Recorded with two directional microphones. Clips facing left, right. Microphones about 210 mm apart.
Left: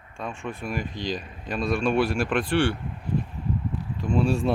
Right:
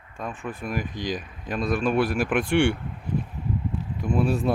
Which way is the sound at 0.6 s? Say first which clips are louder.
Right 1 dB; 15° right (ahead or behind).